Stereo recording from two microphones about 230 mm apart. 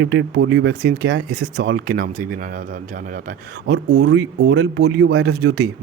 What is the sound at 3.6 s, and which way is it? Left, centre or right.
Speech, right.